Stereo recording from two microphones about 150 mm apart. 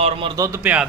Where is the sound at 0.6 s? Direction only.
10° right (ahead or behind).